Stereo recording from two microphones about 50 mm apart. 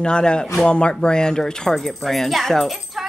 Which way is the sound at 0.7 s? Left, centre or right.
Left.